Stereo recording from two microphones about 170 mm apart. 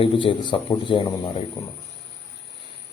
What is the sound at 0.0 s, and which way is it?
A man's voice, 30° left (ahead or behind).